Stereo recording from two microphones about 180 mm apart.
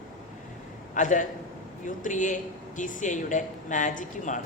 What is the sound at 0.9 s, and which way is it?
A man's voice, 45° left (ahead or behind).